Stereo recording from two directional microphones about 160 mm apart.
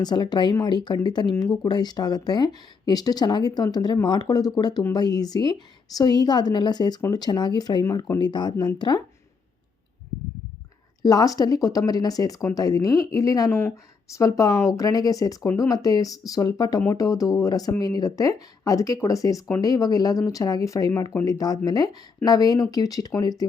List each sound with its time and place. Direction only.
0.0 s speech: 25° left (ahead or behind)
11.0 s speech: 25° left (ahead or behind)